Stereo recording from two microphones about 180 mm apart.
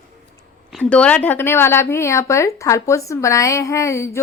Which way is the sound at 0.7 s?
5° left (ahead or behind).